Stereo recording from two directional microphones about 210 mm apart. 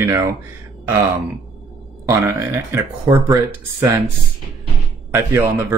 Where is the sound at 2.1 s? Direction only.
15° right (ahead or behind).